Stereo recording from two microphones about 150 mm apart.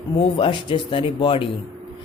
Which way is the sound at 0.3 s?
35° left (ahead or behind).